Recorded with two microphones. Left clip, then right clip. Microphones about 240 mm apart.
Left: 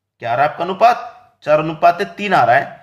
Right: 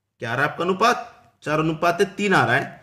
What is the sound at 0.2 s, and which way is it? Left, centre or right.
Speech, right.